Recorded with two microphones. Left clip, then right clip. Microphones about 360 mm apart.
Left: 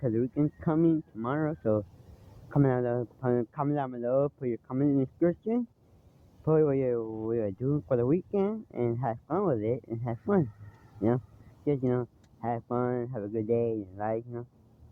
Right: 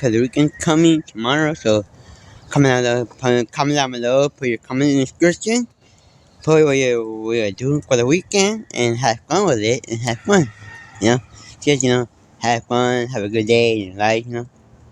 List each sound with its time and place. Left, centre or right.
0.0 s speech: left
11.6 s speech: left